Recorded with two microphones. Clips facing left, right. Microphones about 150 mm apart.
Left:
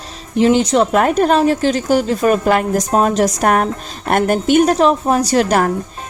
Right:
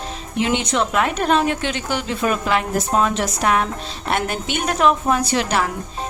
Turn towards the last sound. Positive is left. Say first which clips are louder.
# left 6 dB
turn(degrees=45)  # may be behind; listen again after turning